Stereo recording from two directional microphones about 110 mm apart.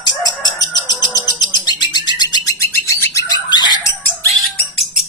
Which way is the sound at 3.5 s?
40° left (ahead or behind).